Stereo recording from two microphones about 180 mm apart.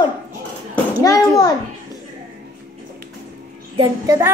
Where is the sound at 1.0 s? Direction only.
20° left (ahead or behind).